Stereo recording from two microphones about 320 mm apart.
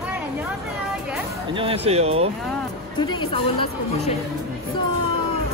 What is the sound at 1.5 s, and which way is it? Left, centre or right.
Speech, centre.